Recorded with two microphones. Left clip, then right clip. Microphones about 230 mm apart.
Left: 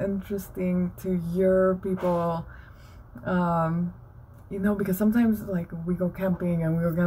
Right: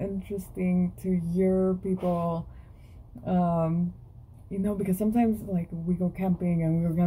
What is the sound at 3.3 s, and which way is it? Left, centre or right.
Speech, left.